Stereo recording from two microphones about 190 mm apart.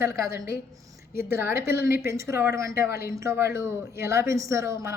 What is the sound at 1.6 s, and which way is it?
A woman's voice, 15° right (ahead or behind).